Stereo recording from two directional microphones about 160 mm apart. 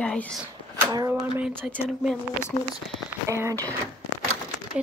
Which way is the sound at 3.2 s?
20° right (ahead or behind).